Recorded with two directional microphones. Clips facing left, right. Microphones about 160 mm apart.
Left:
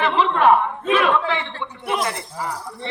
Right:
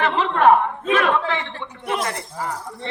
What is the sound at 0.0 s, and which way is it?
Speech, 45° right (ahead or behind).